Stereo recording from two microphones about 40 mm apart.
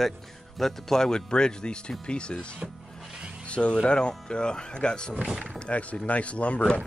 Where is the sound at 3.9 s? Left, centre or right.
Left.